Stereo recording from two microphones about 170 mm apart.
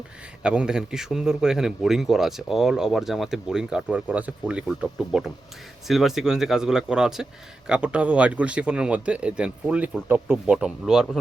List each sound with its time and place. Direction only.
0.4 s speech: 5° right (ahead or behind)